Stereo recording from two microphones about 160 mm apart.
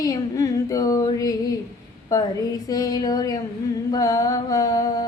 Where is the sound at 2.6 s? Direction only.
25° left (ahead or behind).